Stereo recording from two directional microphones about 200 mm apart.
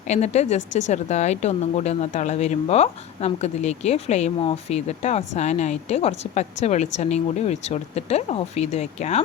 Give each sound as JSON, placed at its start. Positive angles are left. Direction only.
{"t": 0.1, "sound": "a woman's voice", "side_deg": 35}